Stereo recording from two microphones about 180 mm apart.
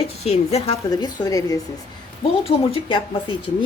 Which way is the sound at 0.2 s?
35° left (ahead or behind).